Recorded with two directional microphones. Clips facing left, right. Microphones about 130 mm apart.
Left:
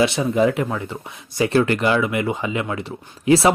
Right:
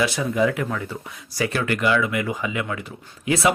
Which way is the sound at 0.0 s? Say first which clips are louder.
Left 4 dB; 25° left (ahead or behind).